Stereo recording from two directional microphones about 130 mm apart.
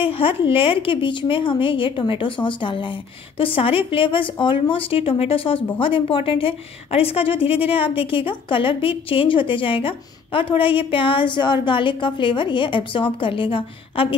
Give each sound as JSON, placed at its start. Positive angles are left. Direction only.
{"t": 0.0, "sound": "speech", "side_deg": 45}